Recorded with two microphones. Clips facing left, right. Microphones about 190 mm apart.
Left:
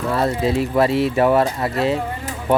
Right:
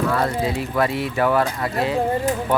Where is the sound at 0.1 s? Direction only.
25° left (ahead or behind).